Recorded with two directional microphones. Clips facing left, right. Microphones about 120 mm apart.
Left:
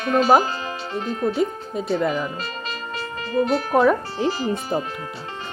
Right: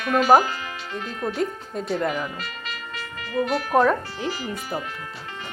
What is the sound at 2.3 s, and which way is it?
Music, 30° left (ahead or behind).